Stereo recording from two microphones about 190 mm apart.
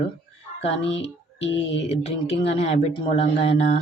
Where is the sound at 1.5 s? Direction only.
35° left (ahead or behind).